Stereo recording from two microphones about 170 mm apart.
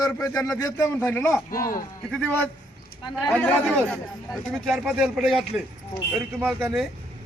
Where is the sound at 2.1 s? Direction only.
10° left (ahead or behind).